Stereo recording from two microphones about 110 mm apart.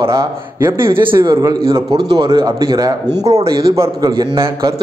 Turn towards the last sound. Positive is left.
turn(degrees=-35)  # may be behind; listen again after turning